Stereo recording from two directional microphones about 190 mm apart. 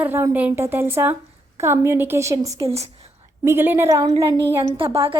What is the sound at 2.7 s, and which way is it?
Whispering, 35° right (ahead or behind).